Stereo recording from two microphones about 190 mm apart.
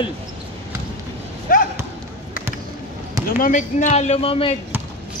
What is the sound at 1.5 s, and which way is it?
Basketball bounce, 50° left (ahead or behind).